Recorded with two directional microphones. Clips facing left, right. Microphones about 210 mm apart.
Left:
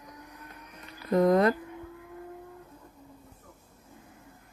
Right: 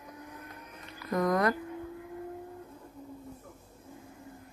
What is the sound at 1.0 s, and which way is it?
Speech, 25° left (ahead or behind).